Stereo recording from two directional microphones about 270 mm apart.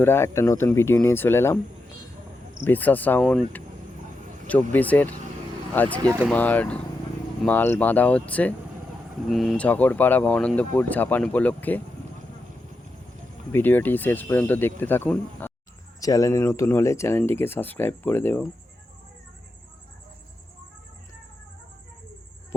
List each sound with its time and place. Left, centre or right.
0.0 s speech: centre
2.6 s speech: centre
4.7 s speech: centre
6.0 s speech: centre
6.2 s speech: centre
13.5 s speech: centre